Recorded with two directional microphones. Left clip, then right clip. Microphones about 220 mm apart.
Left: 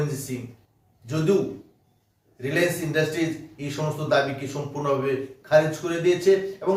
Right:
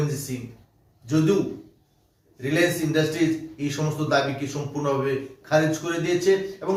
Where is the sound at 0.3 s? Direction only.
5° left (ahead or behind).